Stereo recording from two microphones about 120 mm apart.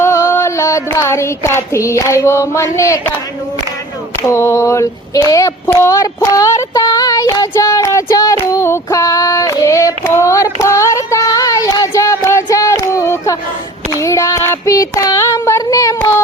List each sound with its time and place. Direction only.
0.3 s music: 25° left (ahead or behind)
0.9 s speech: 25° left (ahead or behind)
4.3 s speech: 25° left (ahead or behind)
8.4 s female singing: 25° left (ahead or behind)
14.0 s child singing: 25° left (ahead or behind)